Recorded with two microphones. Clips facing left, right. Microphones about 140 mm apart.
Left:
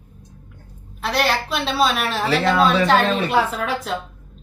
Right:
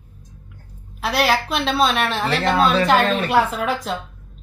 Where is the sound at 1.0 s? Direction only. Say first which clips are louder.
Right 2 dB; 5° right (ahead or behind).